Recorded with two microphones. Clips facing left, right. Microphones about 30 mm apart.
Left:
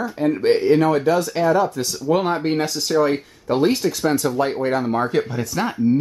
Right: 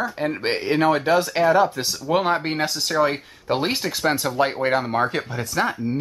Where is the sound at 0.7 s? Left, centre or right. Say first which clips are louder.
Right 2 dB; right.